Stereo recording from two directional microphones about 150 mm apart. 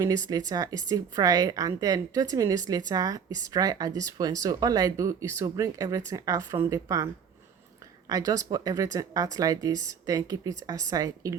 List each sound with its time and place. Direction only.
0.0 s a woman's voice: 25° right (ahead or behind)
8.1 s a woman's voice: 25° right (ahead or behind)